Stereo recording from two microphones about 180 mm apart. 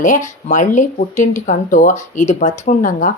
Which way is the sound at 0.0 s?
45° left (ahead or behind).